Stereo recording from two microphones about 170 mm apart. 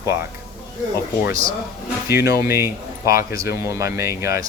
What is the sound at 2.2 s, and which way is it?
Speech, 65° left (ahead or behind).